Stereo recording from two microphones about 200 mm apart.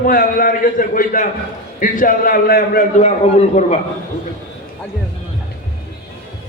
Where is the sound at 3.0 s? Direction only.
35° left (ahead or behind).